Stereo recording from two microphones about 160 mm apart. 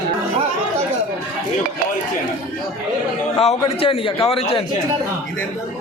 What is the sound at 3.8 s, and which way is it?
Speech, 35° left (ahead or behind).